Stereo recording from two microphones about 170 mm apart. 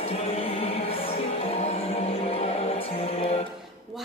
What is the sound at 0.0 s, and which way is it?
Music, 35° left (ahead or behind).